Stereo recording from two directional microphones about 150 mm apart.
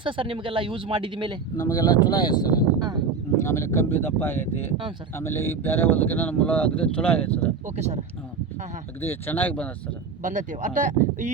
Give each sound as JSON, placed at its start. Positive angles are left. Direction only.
{"t": 0.0, "sound": "speech", "side_deg": -35}
{"t": 1.5, "sound": "speech", "side_deg": 25}
{"t": 2.7, "sound": "speech", "side_deg": -25}
{"t": 3.4, "sound": "speech", "side_deg": 20}
{"t": 9.0, "sound": "speech", "side_deg": 15}
{"t": 10.2, "sound": "speech", "side_deg": -60}